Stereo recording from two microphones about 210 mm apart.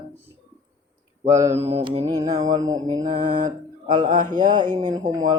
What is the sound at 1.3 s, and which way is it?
Mantra, 15° right (ahead or behind).